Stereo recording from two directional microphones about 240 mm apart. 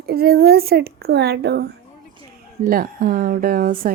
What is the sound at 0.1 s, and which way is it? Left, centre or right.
A woman's voice, right.